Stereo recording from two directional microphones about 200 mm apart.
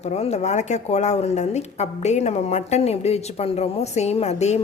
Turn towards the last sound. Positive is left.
turn(degrees=35)  # may be behind; listen again after turning